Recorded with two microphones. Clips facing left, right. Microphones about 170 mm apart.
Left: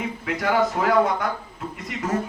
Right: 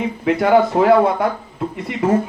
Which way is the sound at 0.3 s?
25° right (ahead or behind).